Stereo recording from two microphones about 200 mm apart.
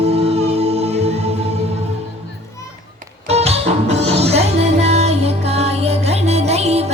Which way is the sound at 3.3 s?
30° right (ahead or behind).